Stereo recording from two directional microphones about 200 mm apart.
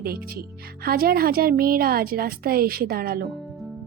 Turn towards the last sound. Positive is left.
turn(degrees=-50)  # may be behind; listen again after turning